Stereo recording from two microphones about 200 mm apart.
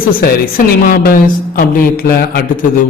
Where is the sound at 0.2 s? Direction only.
45° left (ahead or behind).